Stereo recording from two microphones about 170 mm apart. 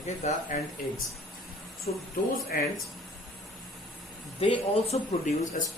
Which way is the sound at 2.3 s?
60° left (ahead or behind).